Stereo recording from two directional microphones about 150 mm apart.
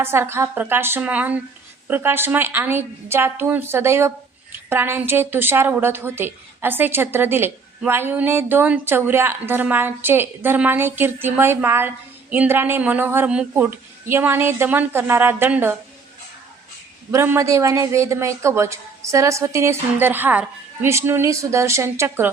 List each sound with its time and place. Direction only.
0.0 s speech: 15° right (ahead or behind)
17.1 s speech: 15° right (ahead or behind)